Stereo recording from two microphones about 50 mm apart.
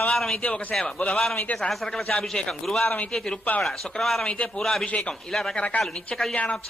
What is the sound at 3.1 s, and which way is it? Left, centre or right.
A man's voice, centre.